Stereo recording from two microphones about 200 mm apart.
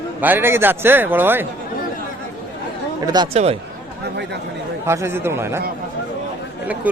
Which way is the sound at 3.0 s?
20° right (ahead or behind).